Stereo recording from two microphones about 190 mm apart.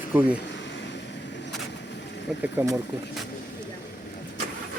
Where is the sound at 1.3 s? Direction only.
65° left (ahead or behind).